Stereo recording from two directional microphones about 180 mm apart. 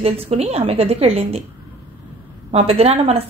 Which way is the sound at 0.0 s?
35° right (ahead or behind).